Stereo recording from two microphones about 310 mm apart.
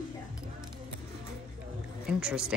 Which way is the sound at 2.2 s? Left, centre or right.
Centre.